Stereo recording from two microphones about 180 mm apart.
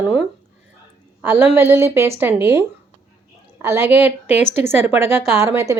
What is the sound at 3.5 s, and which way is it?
A woman's voice, 15° right (ahead or behind).